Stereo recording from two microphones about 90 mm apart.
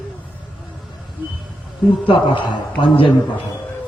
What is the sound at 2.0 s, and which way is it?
Speech, 65° left (ahead or behind).